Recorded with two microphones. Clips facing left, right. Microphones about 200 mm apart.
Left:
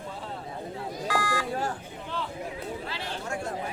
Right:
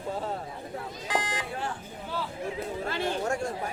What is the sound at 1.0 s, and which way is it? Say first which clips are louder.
Beep: left 3 dB; 20° right (ahead or behind).